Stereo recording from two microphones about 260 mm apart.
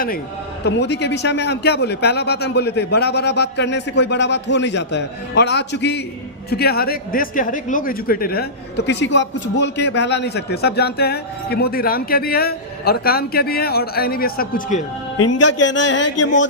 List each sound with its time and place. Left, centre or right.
0.6 s a man's voice: left
15.6 s speech: left